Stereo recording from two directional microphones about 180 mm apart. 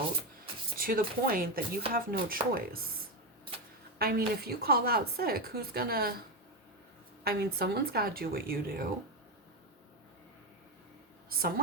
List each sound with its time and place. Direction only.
0.8 s a woman's voice: 55° right (ahead or behind)
3.9 s a woman's voice: 60° right (ahead or behind)
7.3 s a woman's voice: 60° right (ahead or behind)
11.3 s a woman's voice: 55° right (ahead or behind)